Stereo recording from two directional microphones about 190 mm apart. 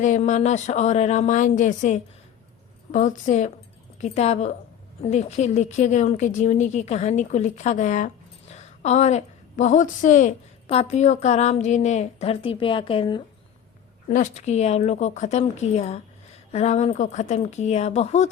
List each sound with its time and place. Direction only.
0.0 s a woman's voice: 40° left (ahead or behind)
14.1 s a woman's voice: 40° left (ahead or behind)